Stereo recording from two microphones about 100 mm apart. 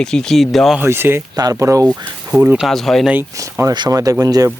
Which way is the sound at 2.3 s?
20° right (ahead or behind).